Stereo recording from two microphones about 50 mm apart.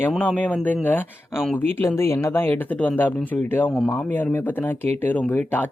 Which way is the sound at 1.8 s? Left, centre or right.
Left.